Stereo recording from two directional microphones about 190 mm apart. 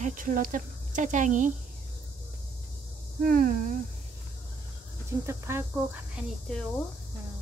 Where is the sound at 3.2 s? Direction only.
50° right (ahead or behind).